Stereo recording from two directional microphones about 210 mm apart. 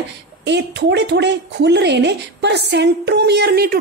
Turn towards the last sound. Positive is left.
turn(degrees=-50)  # may be behind; listen again after turning